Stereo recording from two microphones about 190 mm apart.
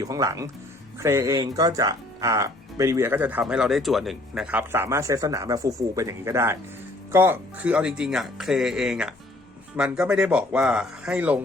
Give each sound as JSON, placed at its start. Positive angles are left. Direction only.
{"t": 0.0, "sound": "speech", "side_deg": -20}